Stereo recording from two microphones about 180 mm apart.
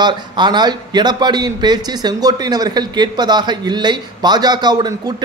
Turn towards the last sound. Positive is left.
turn(degrees=-20)  # may be behind; listen again after turning